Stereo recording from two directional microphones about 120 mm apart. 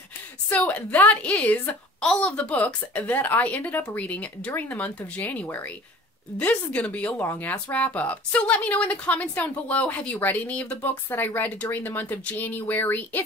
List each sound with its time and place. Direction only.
0.5 s a woman's voice: 10° left (ahead or behind)